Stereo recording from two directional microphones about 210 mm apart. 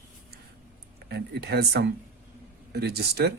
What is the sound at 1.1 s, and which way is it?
Speech, 50° right (ahead or behind).